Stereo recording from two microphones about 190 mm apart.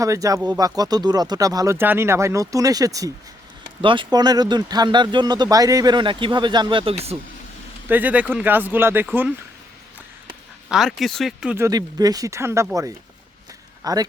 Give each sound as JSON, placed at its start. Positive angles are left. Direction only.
{"t": 0.0, "sound": "speech", "side_deg": -15}
{"t": 7.9, "sound": "speech", "side_deg": -10}
{"t": 10.7, "sound": "speech", "side_deg": 0}
{"t": 11.6, "sound": "speech", "side_deg": -20}